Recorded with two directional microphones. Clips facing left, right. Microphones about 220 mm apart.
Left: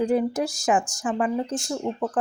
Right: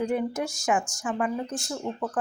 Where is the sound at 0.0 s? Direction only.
35° left (ahead or behind).